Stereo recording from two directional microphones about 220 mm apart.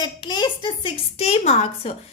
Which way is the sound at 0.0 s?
20° left (ahead or behind).